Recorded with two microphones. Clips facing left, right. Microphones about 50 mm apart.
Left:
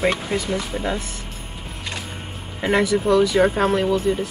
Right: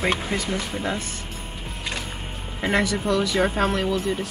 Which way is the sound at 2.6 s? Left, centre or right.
Centre.